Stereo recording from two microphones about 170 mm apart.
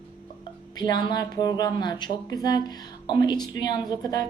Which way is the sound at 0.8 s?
25° left (ahead or behind).